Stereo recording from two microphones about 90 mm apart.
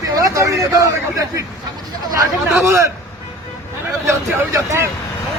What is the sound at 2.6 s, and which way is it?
Speech, 35° right (ahead or behind).